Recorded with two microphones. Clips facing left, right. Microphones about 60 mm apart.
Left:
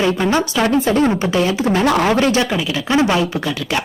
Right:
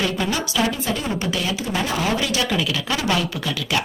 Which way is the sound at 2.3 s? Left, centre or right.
Left.